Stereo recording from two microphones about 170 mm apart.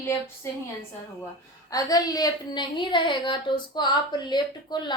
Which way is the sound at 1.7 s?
20° left (ahead or behind).